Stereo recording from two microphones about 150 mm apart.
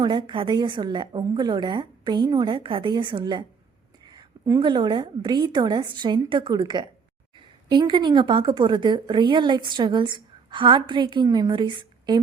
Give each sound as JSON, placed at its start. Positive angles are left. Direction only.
{"t": 0.0, "sound": "a woman's voice", "side_deg": -30}